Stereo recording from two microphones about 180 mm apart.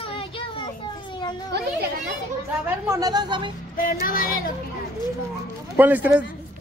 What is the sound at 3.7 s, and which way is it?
Music, 50° left (ahead or behind).